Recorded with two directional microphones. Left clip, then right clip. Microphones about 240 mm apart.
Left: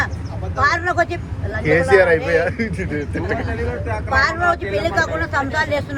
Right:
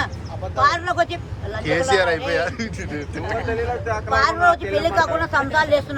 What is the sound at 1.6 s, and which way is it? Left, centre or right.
Speech, centre.